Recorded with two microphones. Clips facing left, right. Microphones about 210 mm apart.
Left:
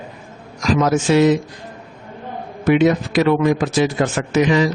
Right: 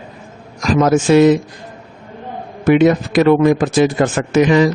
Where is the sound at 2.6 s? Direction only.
50° right (ahead or behind).